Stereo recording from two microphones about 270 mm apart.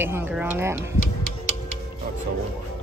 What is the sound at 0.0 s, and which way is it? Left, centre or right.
Speech, centre.